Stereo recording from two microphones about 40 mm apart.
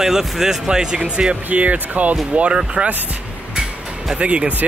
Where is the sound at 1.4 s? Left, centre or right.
Right.